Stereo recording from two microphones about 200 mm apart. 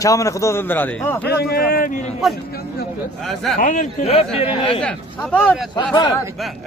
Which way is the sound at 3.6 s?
40° left (ahead or behind).